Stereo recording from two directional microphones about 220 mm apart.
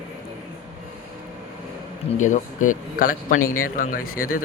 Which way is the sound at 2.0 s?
35° left (ahead or behind).